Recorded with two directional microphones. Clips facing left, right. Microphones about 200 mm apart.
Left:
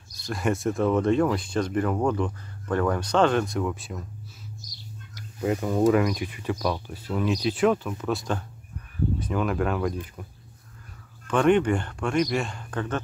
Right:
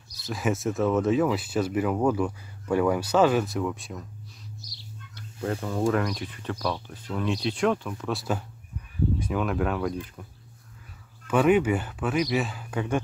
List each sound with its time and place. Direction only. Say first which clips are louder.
0.2 s speech: left 1 dB; centre (ahead or behind)
5.4 s speech: left 4 dB; 10° left (ahead or behind)
5.9 s speech: left 4 dB; 5° left (ahead or behind)
11.2 s speech: even; 5° right (ahead or behind)